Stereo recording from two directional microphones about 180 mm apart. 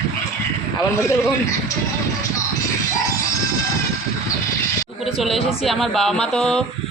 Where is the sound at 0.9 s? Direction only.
15° left (ahead or behind).